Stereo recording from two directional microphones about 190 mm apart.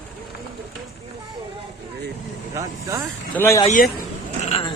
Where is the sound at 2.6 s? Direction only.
15° right (ahead or behind).